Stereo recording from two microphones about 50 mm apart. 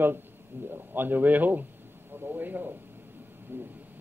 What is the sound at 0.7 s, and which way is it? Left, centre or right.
A man's voice, right.